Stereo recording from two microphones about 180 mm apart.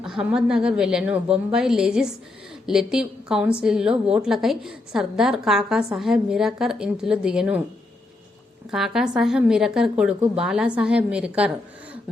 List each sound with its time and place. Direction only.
0.0 s a woman's voice: 5° right (ahead or behind)
8.7 s a woman's voice: centre (ahead or behind)